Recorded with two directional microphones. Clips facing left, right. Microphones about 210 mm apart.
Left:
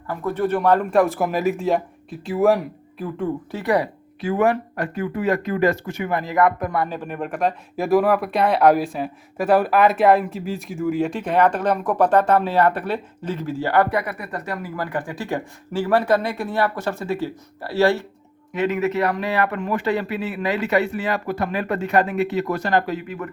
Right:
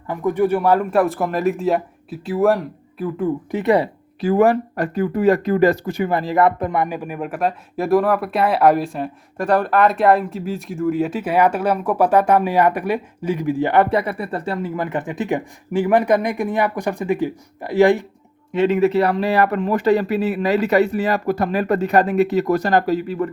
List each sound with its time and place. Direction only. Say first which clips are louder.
0.1 s speech: right 4 dB; 15° right (ahead or behind)
3.5 s speech: right 4 dB; 25° right (ahead or behind)
4.2 s speech: right 4 dB; 35° right (ahead or behind); by 18.0 s 15° right (ahead or behind)
18.5 s a man's voice: right 5 dB; 30° right (ahead or behind)